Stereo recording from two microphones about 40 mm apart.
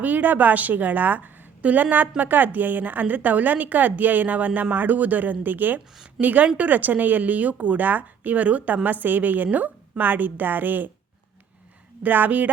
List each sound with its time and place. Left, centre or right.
0.0 s a woman's voice: right
6.1 s a woman's voice: right
12.0 s a woman's voice: right